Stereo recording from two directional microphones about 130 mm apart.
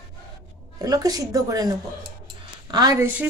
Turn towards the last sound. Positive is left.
turn(degrees=-15)  # may be behind; listen again after turning